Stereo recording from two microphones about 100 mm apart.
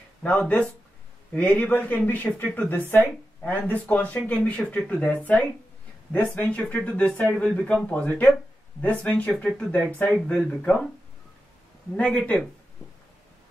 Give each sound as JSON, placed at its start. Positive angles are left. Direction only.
{"t": 0.2, "sound": "speech", "side_deg": 10}
{"t": 12.0, "sound": "speech", "side_deg": 10}